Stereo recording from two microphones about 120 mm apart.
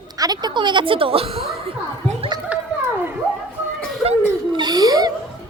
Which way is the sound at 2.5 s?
10° right (ahead or behind).